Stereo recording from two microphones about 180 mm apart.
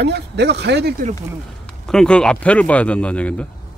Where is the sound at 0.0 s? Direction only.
70° right (ahead or behind).